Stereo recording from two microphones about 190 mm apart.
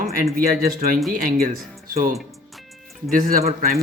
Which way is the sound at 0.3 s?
45° right (ahead or behind).